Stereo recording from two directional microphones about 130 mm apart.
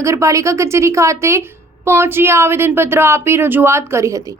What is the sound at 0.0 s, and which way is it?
Speech, 25° right (ahead or behind).